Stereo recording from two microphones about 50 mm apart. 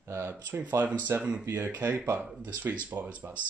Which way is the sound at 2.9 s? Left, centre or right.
Right.